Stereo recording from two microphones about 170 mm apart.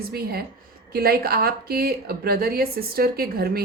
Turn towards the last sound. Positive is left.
turn(degrees=-65)  # may be behind; listen again after turning